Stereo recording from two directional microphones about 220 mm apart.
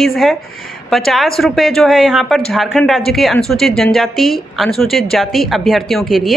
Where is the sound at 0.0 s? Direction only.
Centre (ahead or behind).